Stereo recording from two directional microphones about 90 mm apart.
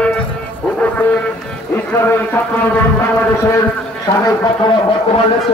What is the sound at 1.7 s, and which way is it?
Speech, 25° left (ahead or behind).